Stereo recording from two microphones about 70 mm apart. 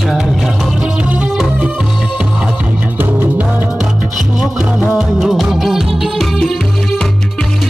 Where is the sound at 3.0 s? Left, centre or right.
Right.